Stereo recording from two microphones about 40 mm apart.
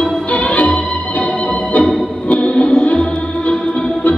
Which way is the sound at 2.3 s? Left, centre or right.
Left.